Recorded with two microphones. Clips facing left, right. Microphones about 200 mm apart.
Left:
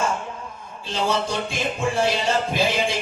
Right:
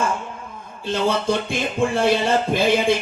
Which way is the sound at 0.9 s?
55° right (ahead or behind).